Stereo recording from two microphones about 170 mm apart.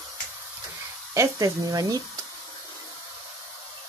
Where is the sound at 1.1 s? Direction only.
20° right (ahead or behind).